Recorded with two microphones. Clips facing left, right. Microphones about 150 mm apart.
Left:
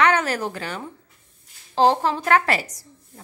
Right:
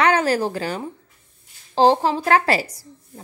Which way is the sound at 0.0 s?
35° right (ahead or behind).